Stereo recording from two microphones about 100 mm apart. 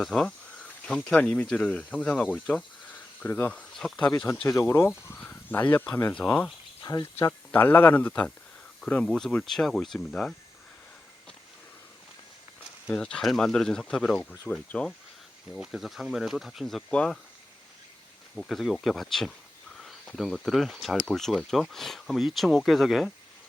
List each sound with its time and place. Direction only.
0.0 s speech: 5° left (ahead or behind)
2.3 s cricket: 10° left (ahead or behind)
3.5 s speech: 10° left (ahead or behind)
4.4 s speech: 25° left (ahead or behind)
5.1 s speech: 15° left (ahead or behind)
6.8 s speech: 40° left (ahead or behind)
7.5 s speech: 20° left (ahead or behind)
12.9 s speech: 10° left (ahead or behind)
18.3 s speech: centre (ahead or behind)
19.7 s cricket: centre (ahead or behind)
20.1 s speech: centre (ahead or behind)